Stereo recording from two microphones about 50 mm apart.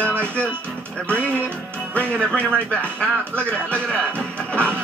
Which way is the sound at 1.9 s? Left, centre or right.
Left.